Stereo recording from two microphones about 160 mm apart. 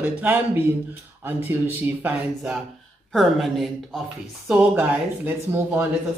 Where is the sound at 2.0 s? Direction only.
5° right (ahead or behind).